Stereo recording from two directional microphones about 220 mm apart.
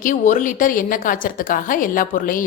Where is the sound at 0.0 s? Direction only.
35° left (ahead or behind).